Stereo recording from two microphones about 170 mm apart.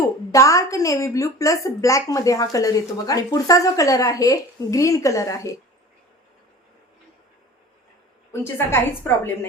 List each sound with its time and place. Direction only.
0.0 s a woman's voice: 20° left (ahead or behind)
8.3 s a woman's voice: 15° left (ahead or behind)